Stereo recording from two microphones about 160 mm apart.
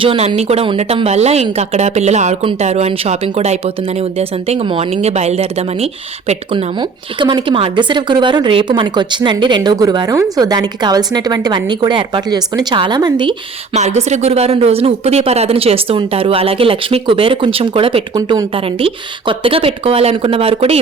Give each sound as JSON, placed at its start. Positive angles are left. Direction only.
{"t": 0.0, "sound": "speech", "side_deg": -30}
{"t": 6.7, "sound": "speech", "side_deg": -30}
{"t": 13.7, "sound": "speech", "side_deg": -45}
{"t": 18.2, "sound": "speech", "side_deg": -20}
{"t": 18.5, "sound": "speech", "side_deg": -35}